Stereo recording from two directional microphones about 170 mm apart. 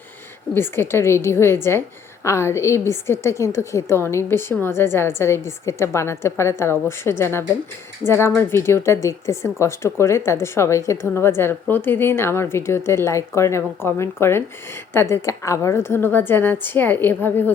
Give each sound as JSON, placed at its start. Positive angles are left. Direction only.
{"t": 0.5, "sound": "a woman's voice", "side_deg": 15}